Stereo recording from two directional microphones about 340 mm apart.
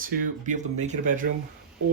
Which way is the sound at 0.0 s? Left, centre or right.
Right.